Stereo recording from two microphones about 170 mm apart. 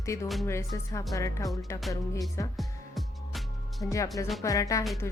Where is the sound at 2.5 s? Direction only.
Centre (ahead or behind).